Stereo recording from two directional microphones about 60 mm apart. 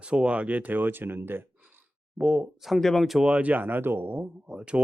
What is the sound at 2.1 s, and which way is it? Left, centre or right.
Speech, centre.